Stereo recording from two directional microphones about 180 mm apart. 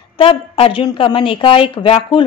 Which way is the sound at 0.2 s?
30° left (ahead or behind).